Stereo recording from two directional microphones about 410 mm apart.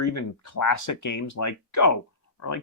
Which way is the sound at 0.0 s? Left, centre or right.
Left.